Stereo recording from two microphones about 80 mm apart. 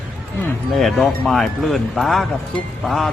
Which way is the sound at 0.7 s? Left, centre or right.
Centre.